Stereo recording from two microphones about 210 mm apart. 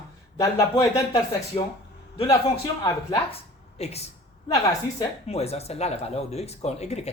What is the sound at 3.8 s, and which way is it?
Speech, 30° left (ahead or behind).